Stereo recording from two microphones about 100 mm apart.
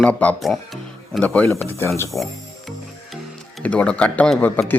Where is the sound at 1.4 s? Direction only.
25° left (ahead or behind).